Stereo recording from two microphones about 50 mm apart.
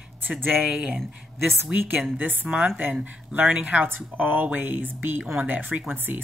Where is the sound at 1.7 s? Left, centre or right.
Right.